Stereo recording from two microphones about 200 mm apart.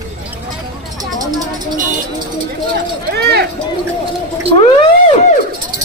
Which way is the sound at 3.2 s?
55° right (ahead or behind).